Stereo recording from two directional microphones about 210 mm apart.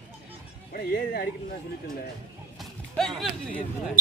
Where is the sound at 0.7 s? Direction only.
50° left (ahead or behind).